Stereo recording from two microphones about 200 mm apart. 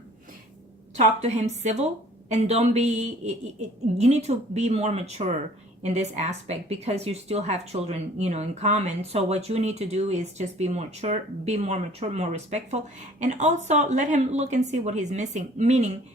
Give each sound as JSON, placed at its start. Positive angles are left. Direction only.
{"t": 0.9, "sound": "speech", "side_deg": -35}